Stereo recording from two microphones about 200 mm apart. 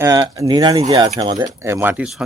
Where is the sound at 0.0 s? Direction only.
15° right (ahead or behind).